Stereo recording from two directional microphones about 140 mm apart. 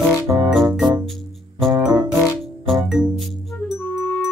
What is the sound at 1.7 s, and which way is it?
Music, 25° right (ahead or behind).